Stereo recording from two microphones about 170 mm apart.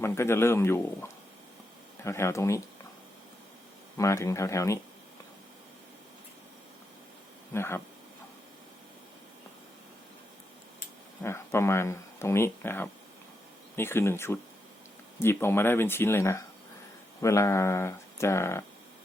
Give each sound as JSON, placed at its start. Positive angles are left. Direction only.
{"t": 0.0, "sound": "speech", "side_deg": 15}
{"t": 3.9, "sound": "speech", "side_deg": 20}
{"t": 7.5, "sound": "speech", "side_deg": 15}
{"t": 11.2, "sound": "speech", "side_deg": 15}